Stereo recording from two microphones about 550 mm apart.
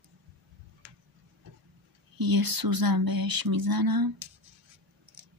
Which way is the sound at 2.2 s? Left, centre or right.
Right.